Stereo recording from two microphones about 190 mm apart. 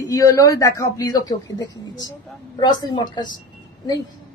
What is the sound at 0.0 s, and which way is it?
A man's voice, 15° left (ahead or behind).